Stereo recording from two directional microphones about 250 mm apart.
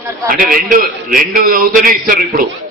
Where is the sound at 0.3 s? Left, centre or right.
Right.